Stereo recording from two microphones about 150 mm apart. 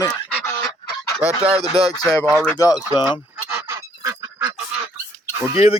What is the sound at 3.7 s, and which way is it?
Goose, 20° right (ahead or behind).